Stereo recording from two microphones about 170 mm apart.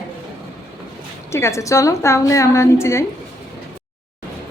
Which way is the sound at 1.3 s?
15° left (ahead or behind).